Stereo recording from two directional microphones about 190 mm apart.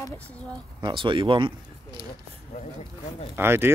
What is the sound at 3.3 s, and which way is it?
Speech, 10° right (ahead or behind).